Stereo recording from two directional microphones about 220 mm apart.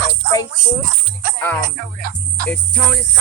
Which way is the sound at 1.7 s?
40° right (ahead or behind).